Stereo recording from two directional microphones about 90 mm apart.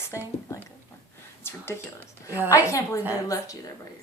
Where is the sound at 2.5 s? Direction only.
35° left (ahead or behind).